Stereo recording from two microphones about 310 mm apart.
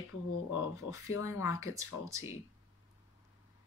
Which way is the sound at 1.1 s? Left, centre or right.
Left.